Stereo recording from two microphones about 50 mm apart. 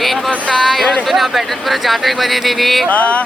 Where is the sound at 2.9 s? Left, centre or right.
Left.